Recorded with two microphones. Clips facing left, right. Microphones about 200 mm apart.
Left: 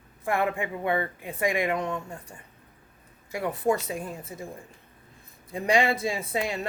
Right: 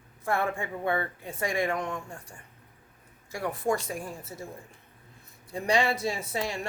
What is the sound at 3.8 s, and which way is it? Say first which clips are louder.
Speech: left 2 dB; 20° left (ahead or behind).